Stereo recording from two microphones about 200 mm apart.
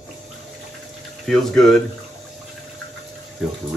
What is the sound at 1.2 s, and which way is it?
Speech, centre (ahead or behind).